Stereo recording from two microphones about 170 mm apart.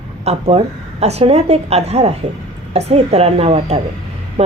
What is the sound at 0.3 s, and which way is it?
A woman's voice, 40° right (ahead or behind).